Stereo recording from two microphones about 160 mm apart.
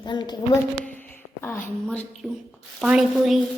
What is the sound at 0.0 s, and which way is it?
Speech, 30° left (ahead or behind).